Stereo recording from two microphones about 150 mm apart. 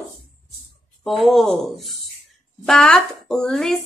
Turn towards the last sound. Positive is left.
turn(degrees=0)  # may be behind; listen again after turning